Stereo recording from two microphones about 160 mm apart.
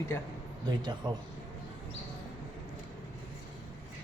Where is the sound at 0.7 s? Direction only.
25° right (ahead or behind).